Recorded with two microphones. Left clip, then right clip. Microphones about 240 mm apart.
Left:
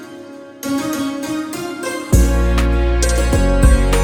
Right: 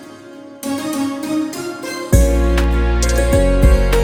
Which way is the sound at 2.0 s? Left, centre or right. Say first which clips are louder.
Right 5 dB; centre.